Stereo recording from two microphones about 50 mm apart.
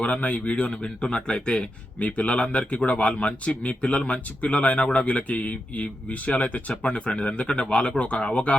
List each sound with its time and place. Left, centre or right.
0.0 s a man's voice: left
2.0 s a man's voice: left